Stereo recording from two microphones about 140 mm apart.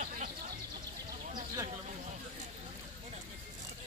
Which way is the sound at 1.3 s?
25° right (ahead or behind).